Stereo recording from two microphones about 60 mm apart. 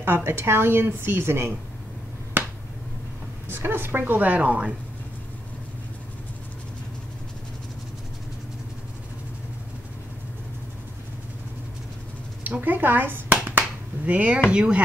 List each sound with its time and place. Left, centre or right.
0.0 s a woman's voice: right
2.4 s finger snapping: right
3.4 s a woman's voice: right
12.4 s finger snapping: right
14.5 s speech: centre